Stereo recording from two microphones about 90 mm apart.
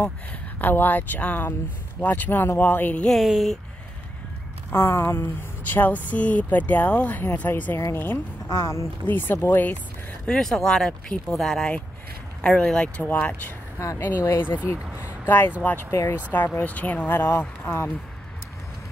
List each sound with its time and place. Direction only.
0.0 s speech: 20° left (ahead or behind)
3.1 s speech: centre (ahead or behind)
4.7 s speech: 30° left (ahead or behind)
10.2 s speech: 5° left (ahead or behind)
13.7 s speech: 30° left (ahead or behind)
14.8 s a sound: 15° right (ahead or behind)
15.2 s speech: 20° left (ahead or behind)
15.9 s speech: 35° left (ahead or behind)
16.3 s speech: 20° left (ahead or behind)